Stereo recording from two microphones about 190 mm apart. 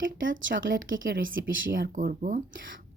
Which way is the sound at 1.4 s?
75° right (ahead or behind).